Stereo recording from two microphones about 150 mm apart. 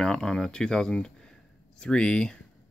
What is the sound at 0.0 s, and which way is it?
Speech, 5° left (ahead or behind).